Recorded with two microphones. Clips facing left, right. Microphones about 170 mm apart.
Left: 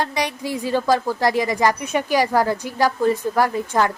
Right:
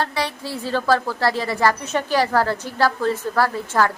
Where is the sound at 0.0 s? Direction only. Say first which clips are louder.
Left 1 dB; 15° left (ahead or behind).